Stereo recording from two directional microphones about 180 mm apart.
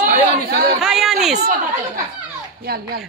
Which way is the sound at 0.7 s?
5° right (ahead or behind).